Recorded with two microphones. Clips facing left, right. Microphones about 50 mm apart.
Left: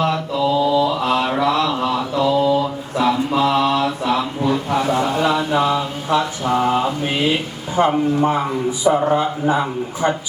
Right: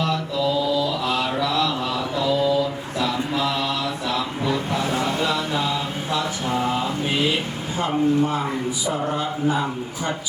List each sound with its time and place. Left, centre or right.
0.0 s mantra: left
7.8 s speech: left